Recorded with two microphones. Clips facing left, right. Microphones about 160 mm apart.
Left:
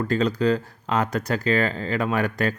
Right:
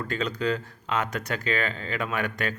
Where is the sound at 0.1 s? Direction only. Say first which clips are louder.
Left 6 dB; 35° left (ahead or behind).